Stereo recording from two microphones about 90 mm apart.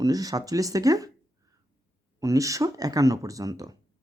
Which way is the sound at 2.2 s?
35° right (ahead or behind).